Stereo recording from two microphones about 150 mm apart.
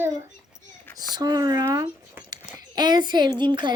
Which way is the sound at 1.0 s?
25° right (ahead or behind).